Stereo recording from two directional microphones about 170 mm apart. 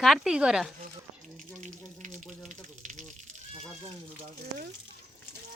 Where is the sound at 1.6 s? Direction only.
45° right (ahead or behind).